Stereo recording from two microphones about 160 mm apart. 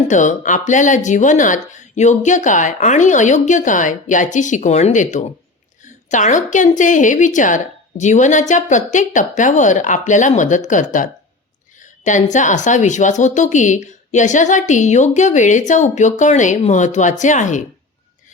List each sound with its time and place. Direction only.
0.1 s a woman's voice: 50° left (ahead or behind)